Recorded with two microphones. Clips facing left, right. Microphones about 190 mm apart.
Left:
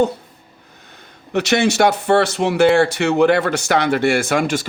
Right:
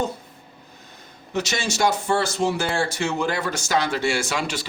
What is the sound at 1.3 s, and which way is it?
Speech, 60° left (ahead or behind).